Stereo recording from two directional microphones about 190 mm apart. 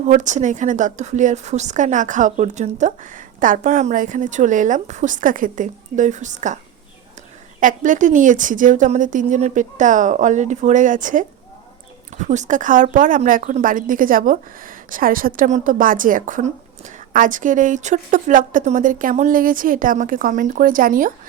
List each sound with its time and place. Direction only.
0.0 s a woman's voice: 40° right (ahead or behind)
7.6 s a woman's voice: 45° right (ahead or behind)